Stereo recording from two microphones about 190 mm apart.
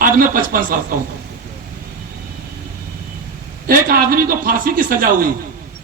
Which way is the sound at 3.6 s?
50° right (ahead or behind).